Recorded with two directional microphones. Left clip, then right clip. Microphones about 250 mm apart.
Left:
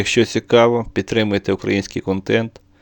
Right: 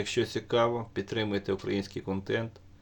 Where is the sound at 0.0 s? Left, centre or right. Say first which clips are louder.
Left 13 dB; left.